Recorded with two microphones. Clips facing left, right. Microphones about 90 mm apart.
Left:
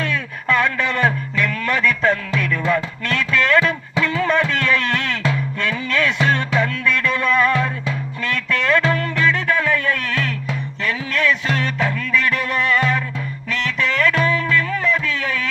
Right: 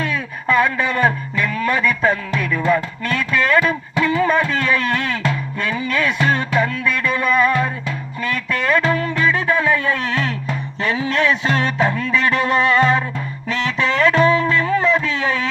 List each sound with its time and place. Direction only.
0.0 s music: 10° right (ahead or behind)
4.0 s a sound: 10° right (ahead or behind)
5.5 s music: 10° right (ahead or behind)